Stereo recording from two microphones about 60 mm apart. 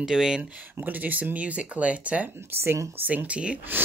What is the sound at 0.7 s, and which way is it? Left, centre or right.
Speech, right.